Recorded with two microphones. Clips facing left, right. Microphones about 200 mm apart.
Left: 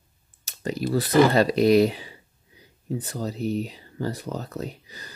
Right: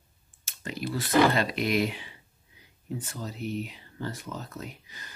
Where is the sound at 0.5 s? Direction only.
35° left (ahead or behind).